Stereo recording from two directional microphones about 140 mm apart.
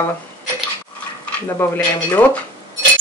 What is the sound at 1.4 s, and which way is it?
Speech, 20° left (ahead or behind).